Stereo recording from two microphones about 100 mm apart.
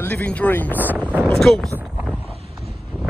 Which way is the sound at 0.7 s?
20° right (ahead or behind).